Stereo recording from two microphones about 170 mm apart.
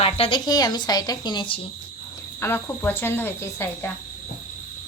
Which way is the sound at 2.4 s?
15° left (ahead or behind).